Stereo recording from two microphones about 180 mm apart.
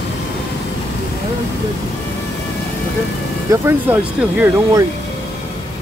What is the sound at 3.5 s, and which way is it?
Speech, 15° right (ahead or behind).